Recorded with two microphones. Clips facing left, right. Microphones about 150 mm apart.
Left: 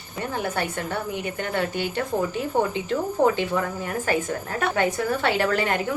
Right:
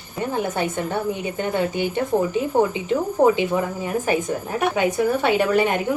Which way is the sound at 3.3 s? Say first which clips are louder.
Right 3 dB; 15° right (ahead or behind).